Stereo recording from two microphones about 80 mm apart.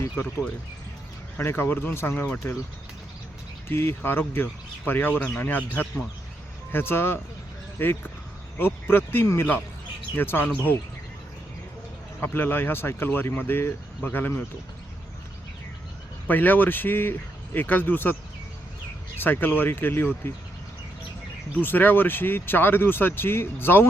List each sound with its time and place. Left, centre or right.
0.2 s speech: left
1.4 s speech: left
3.7 s speech: left
6.7 s speech: left
12.2 s speech: left
16.2 s speech: left
21.6 s speech: left